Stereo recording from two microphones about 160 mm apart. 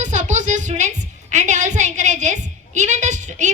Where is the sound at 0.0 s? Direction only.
50° right (ahead or behind).